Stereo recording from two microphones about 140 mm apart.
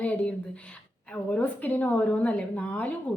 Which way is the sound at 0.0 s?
10° left (ahead or behind).